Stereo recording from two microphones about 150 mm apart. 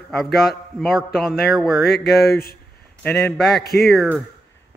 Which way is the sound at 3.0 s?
5° left (ahead or behind).